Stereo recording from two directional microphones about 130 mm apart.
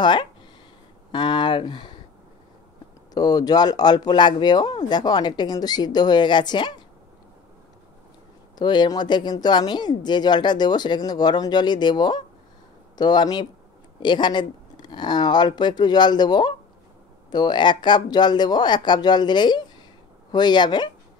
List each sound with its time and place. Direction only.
0.0 s speech: 35° left (ahead or behind)
3.2 s speech: 30° left (ahead or behind)
8.5 s speech: 35° left (ahead or behind)